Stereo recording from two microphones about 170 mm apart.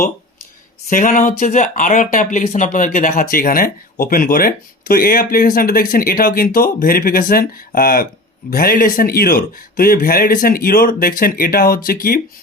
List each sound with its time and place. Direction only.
0.9 s speech: 55° left (ahead or behind)